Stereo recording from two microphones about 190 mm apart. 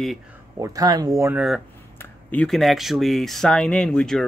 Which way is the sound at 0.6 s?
20° right (ahead or behind).